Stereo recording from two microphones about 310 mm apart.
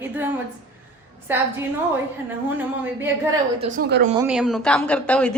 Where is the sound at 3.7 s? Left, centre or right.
Right.